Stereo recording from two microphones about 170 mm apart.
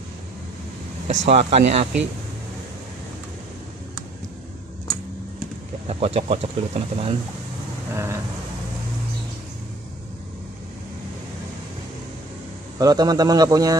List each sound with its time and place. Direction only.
1.0 s speech: 40° right (ahead or behind)
5.9 s speech: 35° right (ahead or behind)
7.9 s vehicle: 15° right (ahead or behind)
12.7 s a man's voice: 20° right (ahead or behind)